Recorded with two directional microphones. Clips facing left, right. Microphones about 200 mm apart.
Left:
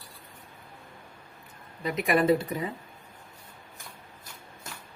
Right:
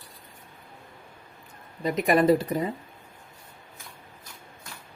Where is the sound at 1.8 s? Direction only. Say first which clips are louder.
Right 3 dB; 40° right (ahead or behind).